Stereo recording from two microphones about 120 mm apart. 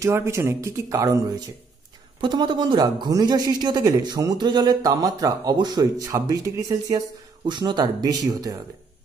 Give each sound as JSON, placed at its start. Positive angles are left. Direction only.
{"t": 0.0, "sound": "speech", "side_deg": -25}